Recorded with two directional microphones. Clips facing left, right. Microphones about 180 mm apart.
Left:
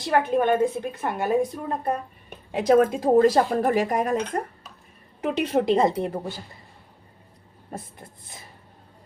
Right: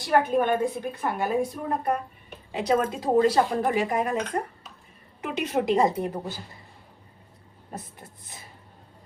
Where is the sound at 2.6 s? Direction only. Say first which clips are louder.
Left 6 dB; 50° left (ahead or behind).